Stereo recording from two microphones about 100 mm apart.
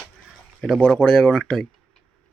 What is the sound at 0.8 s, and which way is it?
Speech, 15° left (ahead or behind).